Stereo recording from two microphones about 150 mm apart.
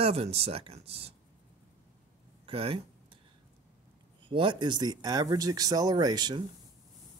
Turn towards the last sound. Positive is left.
turn(degrees=-30)  # may be behind; listen again after turning